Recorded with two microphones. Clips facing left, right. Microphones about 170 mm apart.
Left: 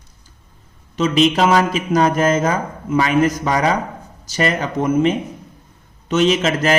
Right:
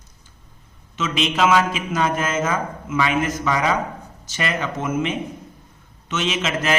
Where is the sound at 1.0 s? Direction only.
40° left (ahead or behind).